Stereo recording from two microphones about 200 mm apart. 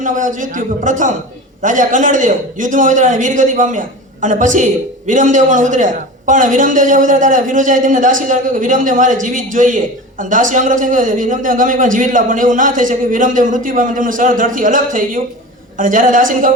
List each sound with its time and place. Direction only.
0.0 s a man's voice: 40° right (ahead or behind)